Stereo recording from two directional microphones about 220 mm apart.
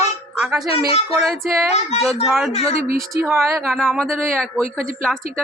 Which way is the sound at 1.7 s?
30° left (ahead or behind).